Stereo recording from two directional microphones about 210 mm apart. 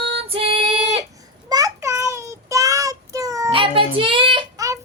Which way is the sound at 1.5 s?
15° right (ahead or behind).